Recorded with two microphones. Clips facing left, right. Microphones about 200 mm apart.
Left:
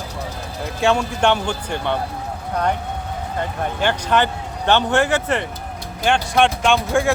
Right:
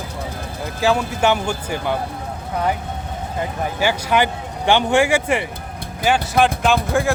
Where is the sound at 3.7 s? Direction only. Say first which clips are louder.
Even; 10° right (ahead or behind).